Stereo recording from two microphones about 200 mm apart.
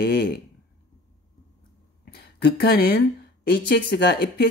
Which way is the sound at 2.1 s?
55° left (ahead or behind).